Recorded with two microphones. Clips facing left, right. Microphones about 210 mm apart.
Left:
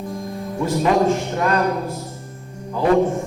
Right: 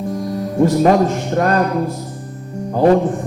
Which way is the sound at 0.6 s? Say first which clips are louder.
Right 7 dB; 45° right (ahead or behind).